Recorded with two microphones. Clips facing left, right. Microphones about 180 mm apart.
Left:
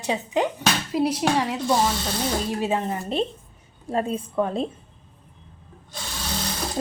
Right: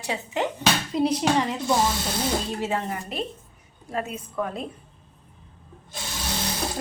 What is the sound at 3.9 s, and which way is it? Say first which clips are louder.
Speech: left 5 dB; 30° left (ahead or behind).